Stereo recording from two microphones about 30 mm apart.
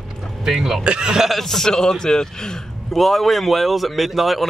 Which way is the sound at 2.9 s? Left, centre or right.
Centre.